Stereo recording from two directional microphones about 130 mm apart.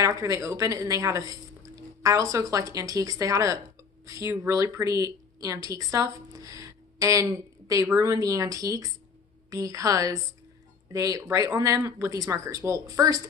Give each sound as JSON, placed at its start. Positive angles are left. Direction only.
{"t": 0.0, "sound": "speech", "side_deg": -25}